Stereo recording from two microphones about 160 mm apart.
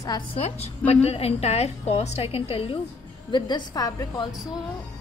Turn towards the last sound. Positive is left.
turn(degrees=25)  # may be behind; listen again after turning